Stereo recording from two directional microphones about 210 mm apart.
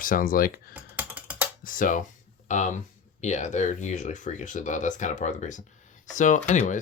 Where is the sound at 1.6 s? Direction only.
40° left (ahead or behind).